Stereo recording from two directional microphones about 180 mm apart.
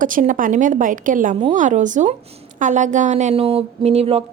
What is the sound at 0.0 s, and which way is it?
A woman's voice, 45° right (ahead or behind).